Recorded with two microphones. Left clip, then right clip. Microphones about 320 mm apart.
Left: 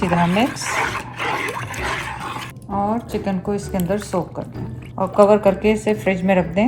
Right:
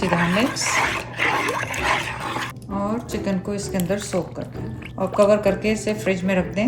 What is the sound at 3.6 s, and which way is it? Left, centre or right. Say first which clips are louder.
Speech: left 2 dB; centre.